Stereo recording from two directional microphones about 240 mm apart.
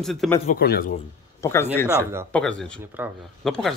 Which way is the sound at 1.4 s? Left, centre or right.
Centre.